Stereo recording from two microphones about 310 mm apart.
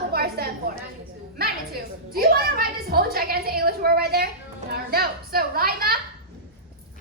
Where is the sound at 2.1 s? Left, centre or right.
Right.